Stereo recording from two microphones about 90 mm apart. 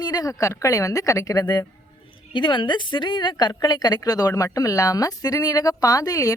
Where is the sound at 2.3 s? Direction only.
65° left (ahead or behind); by 6.3 s 40° left (ahead or behind).